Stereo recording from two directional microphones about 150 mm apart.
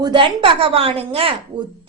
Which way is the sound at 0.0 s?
35° right (ahead or behind).